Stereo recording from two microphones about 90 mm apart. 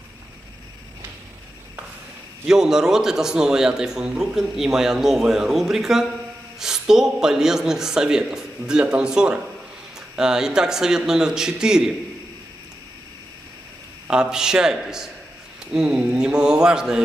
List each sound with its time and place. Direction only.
2.4 s a man's voice: 5° right (ahead or behind)
14.1 s a man's voice: 10° right (ahead or behind)